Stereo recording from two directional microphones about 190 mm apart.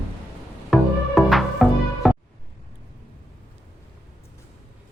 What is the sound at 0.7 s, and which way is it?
Music, centre (ahead or behind).